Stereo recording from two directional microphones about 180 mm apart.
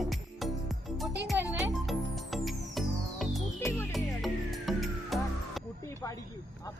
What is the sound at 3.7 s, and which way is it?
Music, 10° left (ahead or behind).